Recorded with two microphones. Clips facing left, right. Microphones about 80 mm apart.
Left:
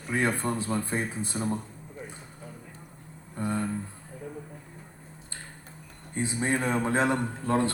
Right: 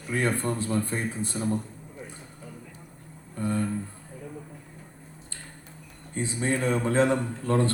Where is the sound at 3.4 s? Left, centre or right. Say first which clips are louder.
Right 2 dB; left.